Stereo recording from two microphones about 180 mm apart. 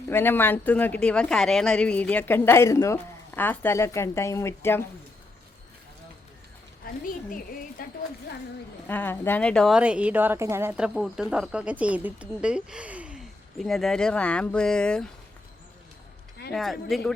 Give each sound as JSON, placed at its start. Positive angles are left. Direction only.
{"t": 0.1, "sound": "speech", "side_deg": 10}
{"t": 7.0, "sound": "a woman's voice", "side_deg": 50}
{"t": 8.9, "sound": "a woman's voice", "side_deg": 10}
{"t": 16.5, "sound": "a woman's voice", "side_deg": 0}